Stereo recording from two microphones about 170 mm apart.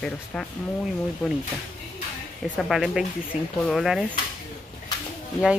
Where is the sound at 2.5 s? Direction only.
Centre (ahead or behind).